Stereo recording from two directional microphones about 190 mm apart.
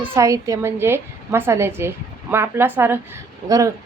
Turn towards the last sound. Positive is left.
turn(degrees=-15)  # may be behind; listen again after turning